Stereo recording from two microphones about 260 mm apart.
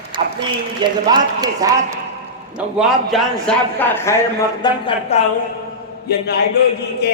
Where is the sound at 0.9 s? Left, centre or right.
Centre.